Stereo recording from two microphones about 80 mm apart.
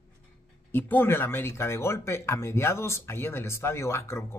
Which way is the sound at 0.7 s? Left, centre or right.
Left.